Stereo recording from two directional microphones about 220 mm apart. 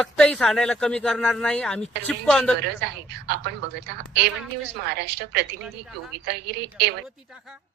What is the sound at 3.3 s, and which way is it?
A woman's voice, 50° right (ahead or behind).